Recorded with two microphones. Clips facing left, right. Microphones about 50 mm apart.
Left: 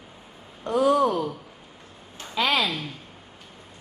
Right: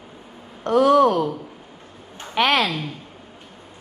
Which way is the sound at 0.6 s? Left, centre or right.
Right.